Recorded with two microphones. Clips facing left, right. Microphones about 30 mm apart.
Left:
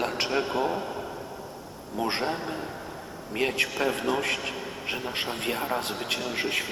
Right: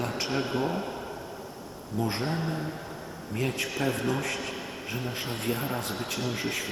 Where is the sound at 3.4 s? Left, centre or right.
Left.